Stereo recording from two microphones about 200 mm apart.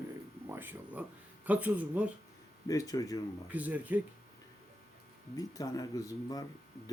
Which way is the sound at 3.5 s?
10° right (ahead or behind).